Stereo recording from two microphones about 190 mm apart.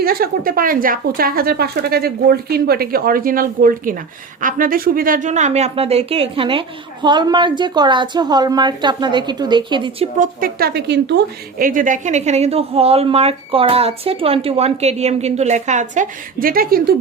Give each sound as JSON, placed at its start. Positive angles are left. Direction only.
{"t": 0.0, "sound": "a woman's voice", "side_deg": -50}
{"t": 10.2, "sound": "a woman's voice", "side_deg": -50}